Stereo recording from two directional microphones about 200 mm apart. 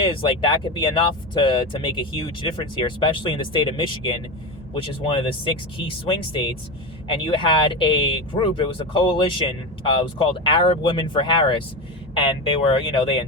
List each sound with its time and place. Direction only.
0.0 s speech: 25° left (ahead or behind)